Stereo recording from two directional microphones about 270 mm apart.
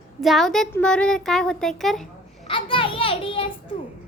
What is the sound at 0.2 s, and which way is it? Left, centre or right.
A child's voice, centre.